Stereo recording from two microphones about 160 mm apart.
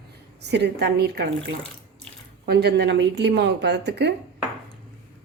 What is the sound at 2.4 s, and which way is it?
A woman's voice, 90° right.